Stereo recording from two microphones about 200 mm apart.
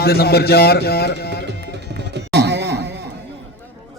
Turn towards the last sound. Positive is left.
turn(degrees=-55)  # may be behind; listen again after turning